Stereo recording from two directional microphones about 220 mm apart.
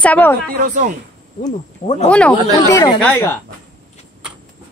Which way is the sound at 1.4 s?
30° left (ahead or behind).